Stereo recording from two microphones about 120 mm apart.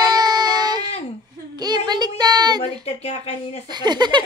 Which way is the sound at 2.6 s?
55° left (ahead or behind).